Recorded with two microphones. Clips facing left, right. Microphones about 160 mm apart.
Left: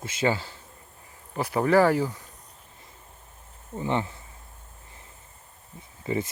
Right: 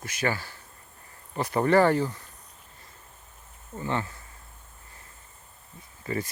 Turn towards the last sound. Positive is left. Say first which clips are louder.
# left 3 dB
turn(degrees=20)  # may be behind; listen again after turning